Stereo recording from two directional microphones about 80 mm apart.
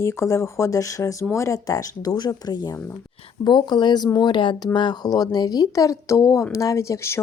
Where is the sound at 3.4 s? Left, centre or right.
Left.